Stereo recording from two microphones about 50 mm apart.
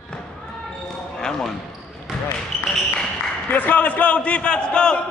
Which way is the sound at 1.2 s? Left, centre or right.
Centre.